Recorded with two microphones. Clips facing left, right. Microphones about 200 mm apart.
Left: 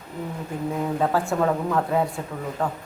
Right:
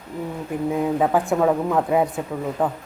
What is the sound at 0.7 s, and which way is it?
Speech, 15° right (ahead or behind).